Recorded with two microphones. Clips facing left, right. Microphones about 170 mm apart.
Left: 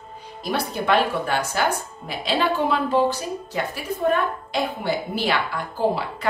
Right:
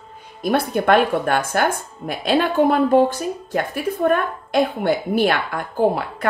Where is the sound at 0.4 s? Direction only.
50° right (ahead or behind).